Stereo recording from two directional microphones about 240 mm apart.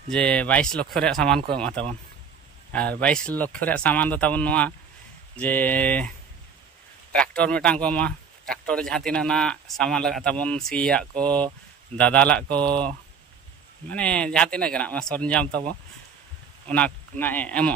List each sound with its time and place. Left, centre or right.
0.1 s speech: centre
7.2 s speech: centre
16.6 s speech: centre